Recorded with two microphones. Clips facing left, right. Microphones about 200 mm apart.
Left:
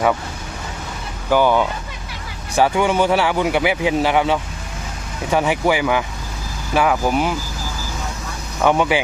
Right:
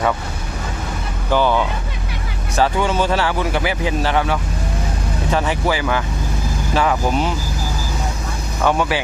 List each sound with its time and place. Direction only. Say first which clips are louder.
1.3 s speech: left 2 dB; 15° left (ahead or behind)
6.7 s speech: left 1 dB; 5° left (ahead or behind)
8.6 s speech: left 2 dB; 15° left (ahead or behind)